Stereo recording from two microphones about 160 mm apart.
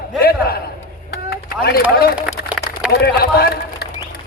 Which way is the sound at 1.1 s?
75° left (ahead or behind).